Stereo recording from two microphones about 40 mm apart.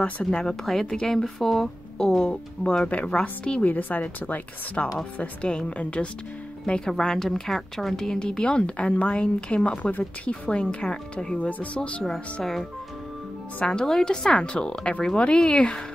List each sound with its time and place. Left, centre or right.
0.2 s a woman's voice: centre
2.0 s a woman's voice: centre
3.6 s speech: left
5.2 s speech: left
6.8 s a woman's voice: centre; by 9.2 s left
9.2 s speech: left
9.8 s speech: left
13.6 s speech: left